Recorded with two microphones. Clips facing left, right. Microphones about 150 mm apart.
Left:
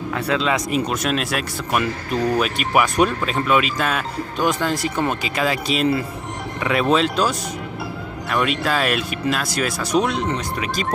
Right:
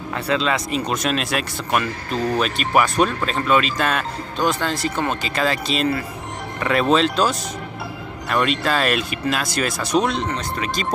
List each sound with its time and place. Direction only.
0.4 s speech: 10° left (ahead or behind)